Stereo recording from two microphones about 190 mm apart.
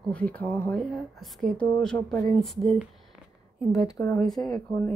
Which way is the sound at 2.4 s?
Centre (ahead or behind).